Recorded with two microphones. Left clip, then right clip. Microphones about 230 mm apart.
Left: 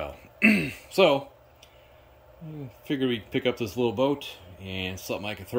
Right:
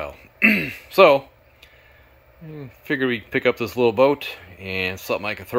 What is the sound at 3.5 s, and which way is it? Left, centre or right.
Speech, right.